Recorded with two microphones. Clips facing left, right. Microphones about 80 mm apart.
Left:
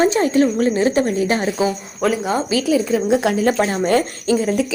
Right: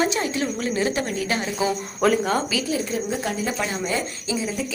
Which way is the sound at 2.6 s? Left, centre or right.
Left.